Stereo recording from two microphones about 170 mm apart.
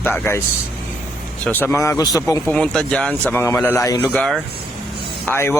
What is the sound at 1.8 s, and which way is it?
Speech, 20° left (ahead or behind).